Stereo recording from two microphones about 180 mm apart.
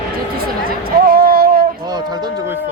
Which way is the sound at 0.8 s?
55° right (ahead or behind).